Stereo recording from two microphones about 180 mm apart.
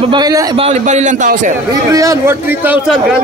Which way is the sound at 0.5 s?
35° right (ahead or behind).